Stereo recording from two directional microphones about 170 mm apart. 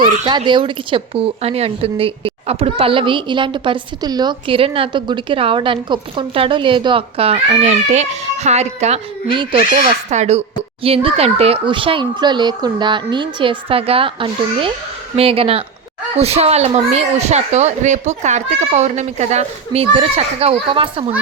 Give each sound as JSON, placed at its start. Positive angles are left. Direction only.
{"t": 0.0, "sound": "speech", "side_deg": -25}
{"t": 9.8, "sound": "speech", "side_deg": -40}